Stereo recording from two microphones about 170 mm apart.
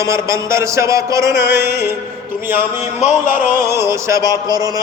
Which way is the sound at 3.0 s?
50° left (ahead or behind).